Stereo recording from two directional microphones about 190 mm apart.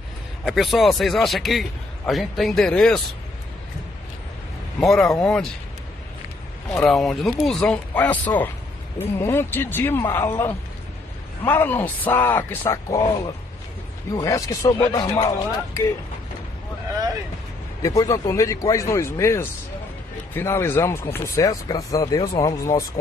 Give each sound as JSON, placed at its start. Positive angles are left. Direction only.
{"t": 0.5, "sound": "a man's voice", "side_deg": 0}
{"t": 4.7, "sound": "a man's voice", "side_deg": 5}
{"t": 6.9, "sound": "a man's voice", "side_deg": 0}
{"t": 14.1, "sound": "speech", "side_deg": 15}
{"t": 17.8, "sound": "speech", "side_deg": 20}